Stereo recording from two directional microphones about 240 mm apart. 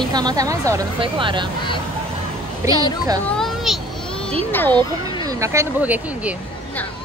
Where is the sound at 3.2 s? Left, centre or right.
Centre.